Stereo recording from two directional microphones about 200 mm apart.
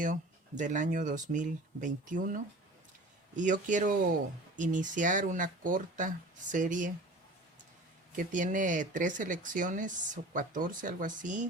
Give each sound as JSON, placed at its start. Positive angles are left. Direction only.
{"t": 0.0, "sound": "speech", "side_deg": -40}
{"t": 8.1, "sound": "speech", "side_deg": -40}